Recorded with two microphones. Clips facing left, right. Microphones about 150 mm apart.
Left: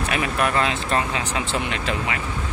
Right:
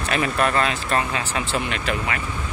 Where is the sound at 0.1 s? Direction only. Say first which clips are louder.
Right 2 dB; 10° left (ahead or behind).